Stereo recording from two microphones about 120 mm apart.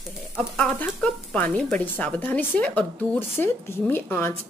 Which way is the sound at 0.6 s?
10° left (ahead or behind).